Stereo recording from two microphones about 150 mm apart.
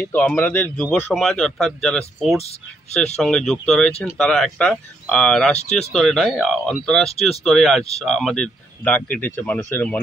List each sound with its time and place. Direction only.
0.1 s speech: 10° left (ahead or behind)
7.1 s speech: 40° left (ahead or behind)
7.4 s speech: centre (ahead or behind)